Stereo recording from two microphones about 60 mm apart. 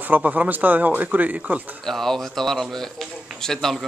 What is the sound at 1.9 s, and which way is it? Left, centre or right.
A man's voice, centre.